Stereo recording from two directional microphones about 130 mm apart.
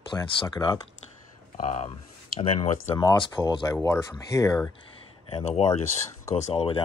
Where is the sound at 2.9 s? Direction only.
40° left (ahead or behind).